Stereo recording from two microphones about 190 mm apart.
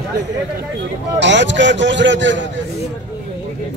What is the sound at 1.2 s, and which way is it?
A man's voice, 70° right (ahead or behind).